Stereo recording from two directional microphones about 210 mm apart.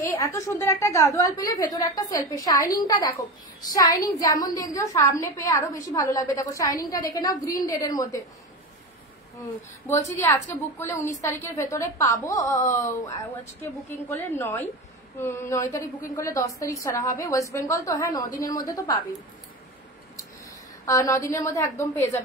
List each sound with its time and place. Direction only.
0.1 s a woman's voice: 15° left (ahead or behind)
9.8 s a woman's voice: 15° left (ahead or behind)
14.0 s a woman's voice: 10° left (ahead or behind)
20.8 s a woman's voice: 15° left (ahead or behind)